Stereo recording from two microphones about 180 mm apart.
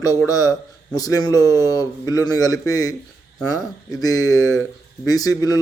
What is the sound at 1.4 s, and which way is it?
Speech, 15° right (ahead or behind).